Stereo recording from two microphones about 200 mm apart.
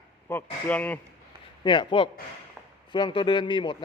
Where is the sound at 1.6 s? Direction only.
25° left (ahead or behind).